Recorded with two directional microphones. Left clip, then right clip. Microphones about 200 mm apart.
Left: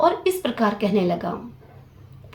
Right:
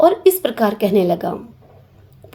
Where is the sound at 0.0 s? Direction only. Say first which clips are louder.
Right 7 dB; 50° right (ahead or behind).